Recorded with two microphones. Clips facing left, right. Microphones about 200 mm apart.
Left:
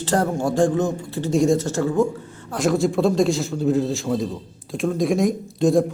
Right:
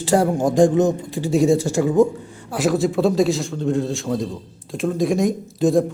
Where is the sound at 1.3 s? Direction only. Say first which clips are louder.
Right 2 dB; 5° right (ahead or behind).